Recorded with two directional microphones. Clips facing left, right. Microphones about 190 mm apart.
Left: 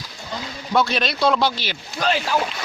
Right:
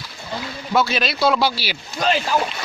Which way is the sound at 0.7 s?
5° right (ahead or behind).